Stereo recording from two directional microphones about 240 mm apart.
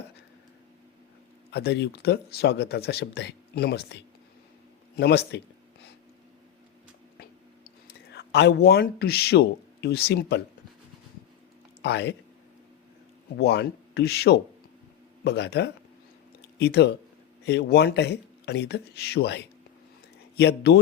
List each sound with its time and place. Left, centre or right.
1.5 s speech: left
7.9 s speech: left
11.8 s speech: left
13.3 s speech: left